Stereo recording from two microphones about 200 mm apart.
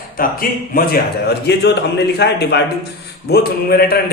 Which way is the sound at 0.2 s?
45° left (ahead or behind).